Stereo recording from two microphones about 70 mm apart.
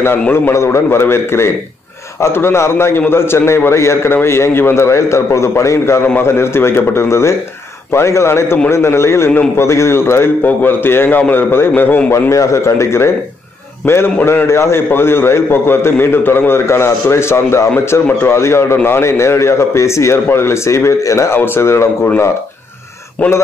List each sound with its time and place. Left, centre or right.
0.3 s a man's voice: left
12.3 s a man's voice: left
21.4 s a man's voice: left
23.2 s speech: left